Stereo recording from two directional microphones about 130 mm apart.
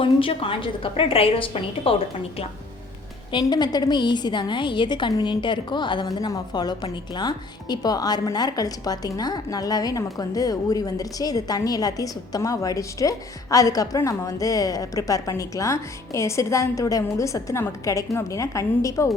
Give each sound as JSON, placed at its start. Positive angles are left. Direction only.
{"t": 0.0, "sound": "a woman's voice", "side_deg": 45}
{"t": 3.3, "sound": "a woman's voice", "side_deg": 30}